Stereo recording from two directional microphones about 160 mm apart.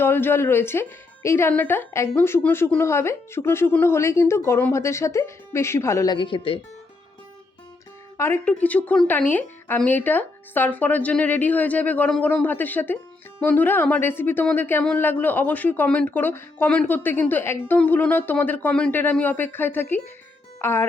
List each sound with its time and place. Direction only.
0.0 s speech: 15° left (ahead or behind)
6.1 s speech: 30° left (ahead or behind)
8.2 s speech: 15° left (ahead or behind)